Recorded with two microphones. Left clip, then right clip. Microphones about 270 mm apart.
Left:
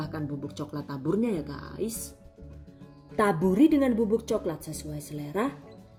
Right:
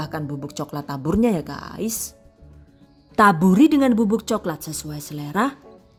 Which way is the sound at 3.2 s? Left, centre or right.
Right.